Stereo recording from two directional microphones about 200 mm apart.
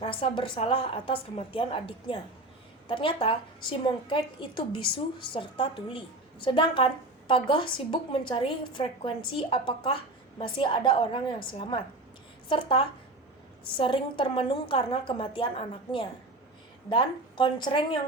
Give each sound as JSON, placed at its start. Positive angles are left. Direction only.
{"t": 0.0, "sound": "a woman's voice", "side_deg": 25}